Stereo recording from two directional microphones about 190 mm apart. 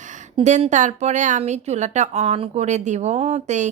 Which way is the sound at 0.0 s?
40° right (ahead or behind).